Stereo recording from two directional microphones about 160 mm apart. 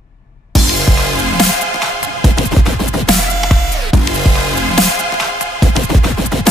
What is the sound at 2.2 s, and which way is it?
Music, centre (ahead or behind).